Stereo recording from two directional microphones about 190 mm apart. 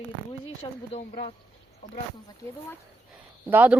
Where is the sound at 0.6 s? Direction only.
25° left (ahead or behind).